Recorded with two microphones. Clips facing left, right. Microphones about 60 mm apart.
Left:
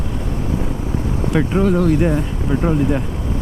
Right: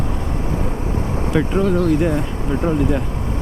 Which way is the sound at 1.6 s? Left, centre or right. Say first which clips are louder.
Left 2 dB; left.